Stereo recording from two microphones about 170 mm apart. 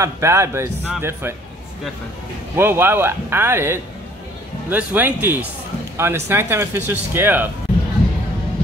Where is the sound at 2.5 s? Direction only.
15° right (ahead or behind).